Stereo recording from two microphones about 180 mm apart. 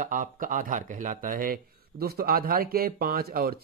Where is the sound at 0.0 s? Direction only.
45° right (ahead or behind).